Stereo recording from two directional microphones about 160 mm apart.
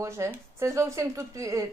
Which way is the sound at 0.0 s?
15° right (ahead or behind).